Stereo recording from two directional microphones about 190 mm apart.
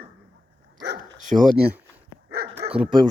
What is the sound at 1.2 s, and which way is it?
Speech, 45° right (ahead or behind).